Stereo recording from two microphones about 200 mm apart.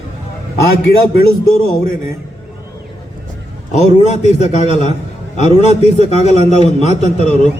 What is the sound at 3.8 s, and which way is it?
A man's voice, 35° left (ahead or behind).